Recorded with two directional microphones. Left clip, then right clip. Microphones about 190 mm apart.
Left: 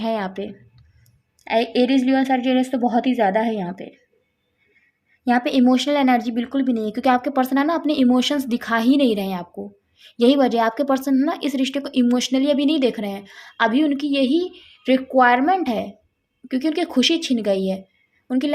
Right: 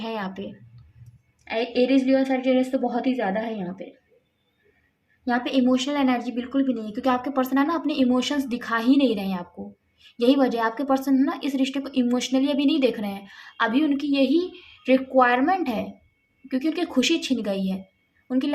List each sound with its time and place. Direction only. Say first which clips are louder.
0.0 s speech: left 7 dB; 45° left (ahead or behind)
1.5 s a woman's voice: left 3 dB; 60° left (ahead or behind)
5.3 s a woman's voice: left 5 dB; 50° left (ahead or behind)